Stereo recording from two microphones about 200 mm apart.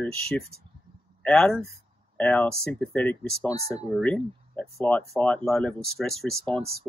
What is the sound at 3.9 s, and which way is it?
Speech, 5° left (ahead or behind).